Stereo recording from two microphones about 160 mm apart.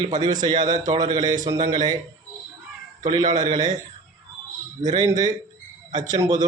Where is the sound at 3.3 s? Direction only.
25° right (ahead or behind).